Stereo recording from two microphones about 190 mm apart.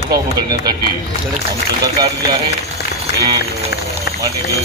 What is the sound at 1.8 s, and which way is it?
Speech, 20° right (ahead or behind).